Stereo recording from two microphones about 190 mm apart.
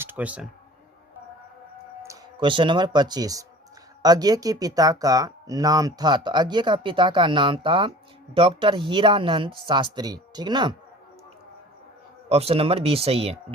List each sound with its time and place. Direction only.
0.0 s speech: 10° right (ahead or behind)
2.0 s speech: 25° right (ahead or behind)
12.3 s speech: 30° right (ahead or behind)